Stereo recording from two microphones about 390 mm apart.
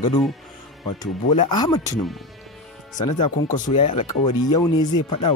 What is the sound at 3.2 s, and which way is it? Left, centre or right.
Speech, centre.